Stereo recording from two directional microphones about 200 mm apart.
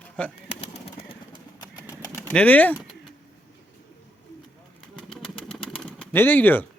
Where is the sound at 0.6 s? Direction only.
25° left (ahead or behind).